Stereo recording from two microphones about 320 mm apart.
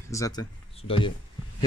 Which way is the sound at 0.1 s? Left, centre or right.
Centre.